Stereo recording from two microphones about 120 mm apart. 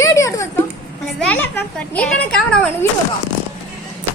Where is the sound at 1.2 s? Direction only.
15° left (ahead or behind).